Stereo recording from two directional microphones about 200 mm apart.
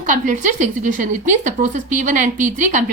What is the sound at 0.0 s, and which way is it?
A woman's voice, 40° right (ahead or behind).